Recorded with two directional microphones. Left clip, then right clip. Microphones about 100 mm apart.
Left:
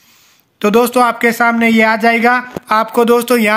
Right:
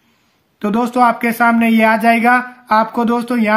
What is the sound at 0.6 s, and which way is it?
Speech, 25° left (ahead or behind).